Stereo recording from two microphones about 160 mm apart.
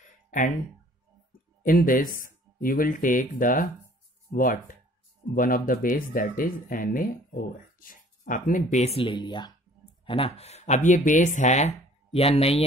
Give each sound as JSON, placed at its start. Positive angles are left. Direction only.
{"t": 1.6, "sound": "speech", "side_deg": 60}